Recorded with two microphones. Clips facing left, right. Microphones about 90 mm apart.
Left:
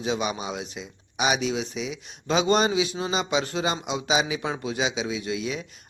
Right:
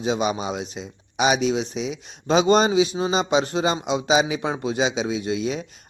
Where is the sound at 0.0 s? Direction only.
25° right (ahead or behind).